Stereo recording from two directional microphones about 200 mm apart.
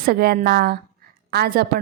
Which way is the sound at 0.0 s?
50° right (ahead or behind).